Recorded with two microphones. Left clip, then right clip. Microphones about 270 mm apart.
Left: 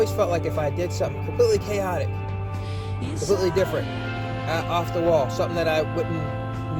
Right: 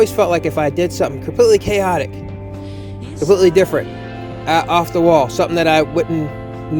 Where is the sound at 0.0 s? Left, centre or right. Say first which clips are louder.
Right 9 dB; right.